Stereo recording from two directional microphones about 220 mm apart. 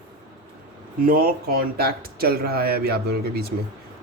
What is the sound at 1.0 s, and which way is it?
Speech, 45° right (ahead or behind).